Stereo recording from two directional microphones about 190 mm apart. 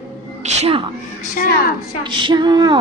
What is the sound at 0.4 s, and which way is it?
Speech, 35° right (ahead or behind).